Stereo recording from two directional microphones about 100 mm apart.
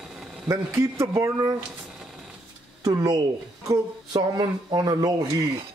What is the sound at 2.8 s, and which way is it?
A woman's voice, 40° right (ahead or behind).